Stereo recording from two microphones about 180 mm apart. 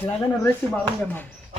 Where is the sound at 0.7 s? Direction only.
10° left (ahead or behind).